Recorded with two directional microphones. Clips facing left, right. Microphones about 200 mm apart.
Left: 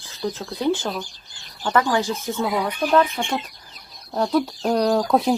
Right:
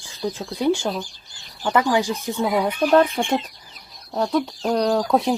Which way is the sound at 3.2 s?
30° right (ahead or behind).